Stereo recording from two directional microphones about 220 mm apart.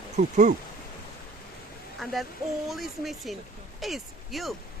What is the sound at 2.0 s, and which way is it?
Speech, centre (ahead or behind).